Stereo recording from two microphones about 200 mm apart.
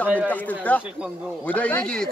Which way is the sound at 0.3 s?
10° left (ahead or behind).